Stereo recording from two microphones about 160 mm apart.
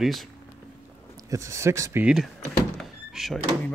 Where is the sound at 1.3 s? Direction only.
20° right (ahead or behind).